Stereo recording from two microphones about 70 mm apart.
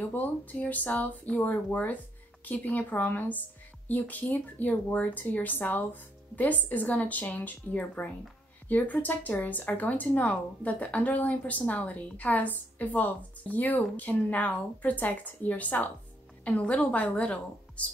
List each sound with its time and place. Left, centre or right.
0.1 s speech: left